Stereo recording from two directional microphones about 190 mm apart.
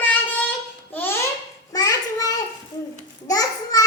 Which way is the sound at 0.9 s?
10° left (ahead or behind).